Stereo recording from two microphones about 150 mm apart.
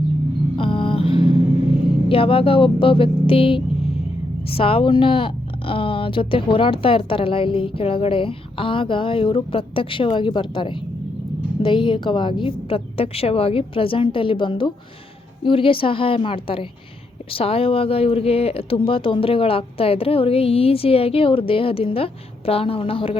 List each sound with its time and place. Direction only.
0.5 s vehicle: 35° left (ahead or behind)
2.0 s speech: 35° left (ahead or behind)